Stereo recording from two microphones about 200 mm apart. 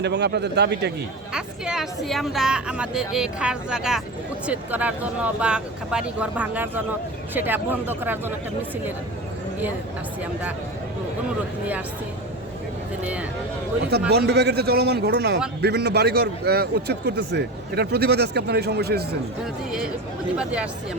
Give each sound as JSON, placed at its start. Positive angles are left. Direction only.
{"t": 0.0, "sound": "a man's voice", "side_deg": -60}
{"t": 1.3, "sound": "a woman's voice", "side_deg": -5}
{"t": 14.1, "sound": "a man's voice", "side_deg": -55}
{"t": 20.4, "sound": "a woman's voice", "side_deg": -5}